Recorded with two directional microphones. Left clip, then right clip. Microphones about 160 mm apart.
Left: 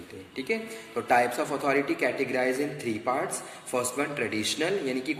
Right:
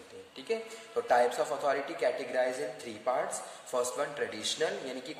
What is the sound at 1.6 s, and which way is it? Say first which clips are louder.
Speech: left 6 dB; 40° right (ahead or behind).